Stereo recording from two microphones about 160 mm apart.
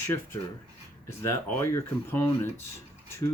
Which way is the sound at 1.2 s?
15° left (ahead or behind).